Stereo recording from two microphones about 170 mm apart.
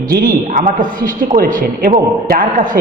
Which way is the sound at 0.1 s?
55° right (ahead or behind).